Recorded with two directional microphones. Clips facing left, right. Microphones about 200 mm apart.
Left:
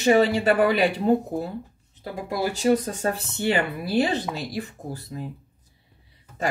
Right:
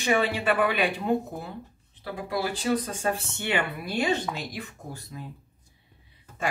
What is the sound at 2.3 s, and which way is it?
Speech, 45° left (ahead or behind).